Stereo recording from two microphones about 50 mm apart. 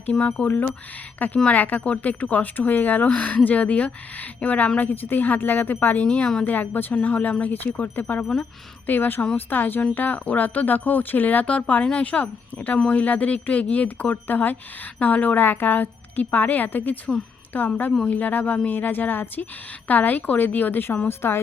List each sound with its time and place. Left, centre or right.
0.1 s speech: left
0.4 s speech: left
4.8 s speech: left
6.1 s speech: left
6.5 s speech: left
21.1 s a woman's voice: left